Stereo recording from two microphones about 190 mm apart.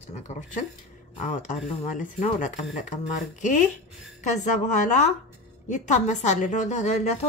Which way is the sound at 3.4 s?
40° left (ahead or behind).